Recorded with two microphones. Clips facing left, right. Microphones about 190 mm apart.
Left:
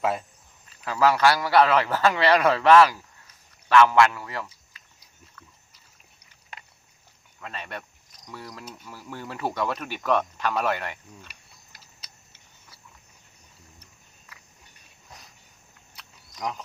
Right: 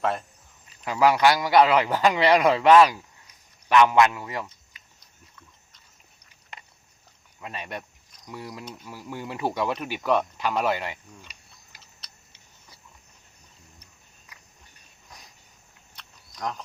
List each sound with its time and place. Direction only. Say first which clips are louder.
0.0 s speech: even; 5° left (ahead or behind)
0.9 s a man's voice: right 1 dB; 15° right (ahead or behind)
4.7 s pig: even; 20° right (ahead or behind)
7.3 s a man's voice: right 1 dB; 15° right (ahead or behind)
16.0 s a sound: even; 5° left (ahead or behind)